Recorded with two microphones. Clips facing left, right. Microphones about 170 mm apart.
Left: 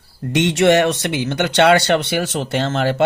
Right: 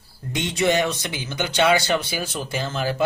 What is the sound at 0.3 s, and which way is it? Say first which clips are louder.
Speech: left 7 dB; 75° left (ahead or behind).